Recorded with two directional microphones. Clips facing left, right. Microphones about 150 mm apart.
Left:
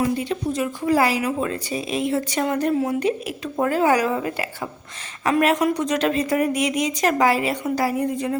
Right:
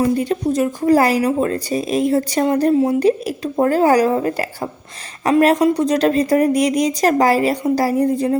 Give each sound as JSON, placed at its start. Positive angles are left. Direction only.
{"t": 0.0, "sound": "speech", "side_deg": -40}